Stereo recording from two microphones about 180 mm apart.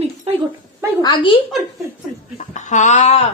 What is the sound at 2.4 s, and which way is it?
Speech, 40° left (ahead or behind).